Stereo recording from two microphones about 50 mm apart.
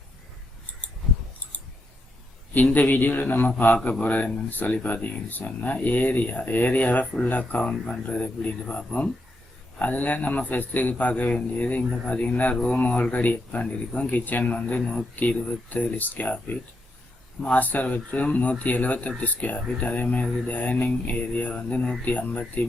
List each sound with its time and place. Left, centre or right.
2.7 s speech: left
7.6 s speech: centre
8.0 s speech: left
9.7 s speech: left
12.5 s speech: centre